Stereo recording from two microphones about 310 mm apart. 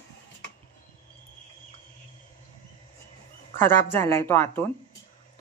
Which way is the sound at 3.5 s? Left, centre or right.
Centre.